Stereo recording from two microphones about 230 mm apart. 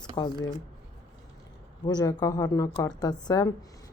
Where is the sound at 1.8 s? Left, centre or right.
Centre.